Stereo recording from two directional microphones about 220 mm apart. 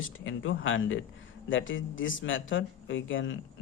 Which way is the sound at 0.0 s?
60° left (ahead or behind).